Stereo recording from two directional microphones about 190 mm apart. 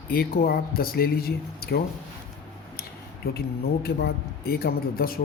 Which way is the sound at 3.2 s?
55° left (ahead or behind).